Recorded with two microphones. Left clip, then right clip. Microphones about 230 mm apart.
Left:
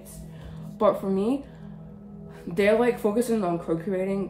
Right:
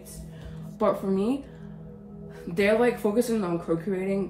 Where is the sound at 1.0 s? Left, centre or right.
Left.